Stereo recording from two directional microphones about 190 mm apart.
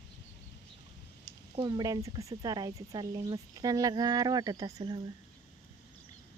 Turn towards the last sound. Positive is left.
turn(degrees=-20)  # may be behind; listen again after turning